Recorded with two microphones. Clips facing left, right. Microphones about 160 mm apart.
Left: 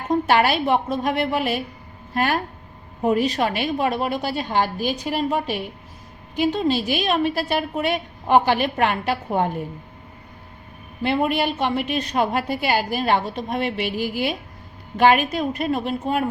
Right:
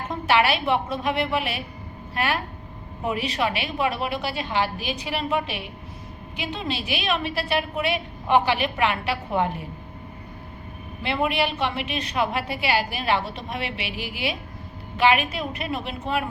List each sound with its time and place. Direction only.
0.1 s a woman's voice: 45° left (ahead or behind)
11.0 s a woman's voice: 45° left (ahead or behind)